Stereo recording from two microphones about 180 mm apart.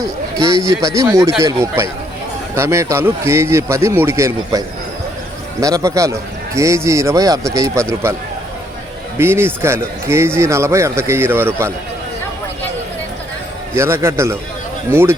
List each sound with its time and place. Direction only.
0.6 s speech: 15° right (ahead or behind)
9.1 s speech: 15° right (ahead or behind)
13.7 s speech: 15° right (ahead or behind)